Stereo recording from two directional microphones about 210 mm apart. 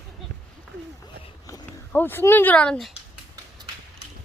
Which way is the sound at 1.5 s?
10° left (ahead or behind).